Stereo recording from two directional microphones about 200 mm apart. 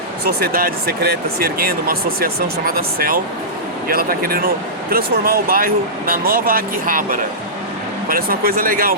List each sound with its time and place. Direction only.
0.3 s speech: 50° right (ahead or behind)